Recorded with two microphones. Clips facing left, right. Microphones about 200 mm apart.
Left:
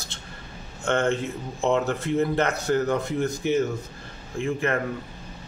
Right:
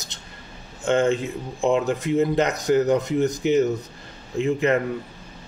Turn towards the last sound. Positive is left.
turn(degrees=-20)  # may be behind; listen again after turning